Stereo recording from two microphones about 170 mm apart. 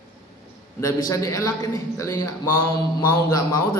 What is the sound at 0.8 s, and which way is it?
Speech, 20° left (ahead or behind).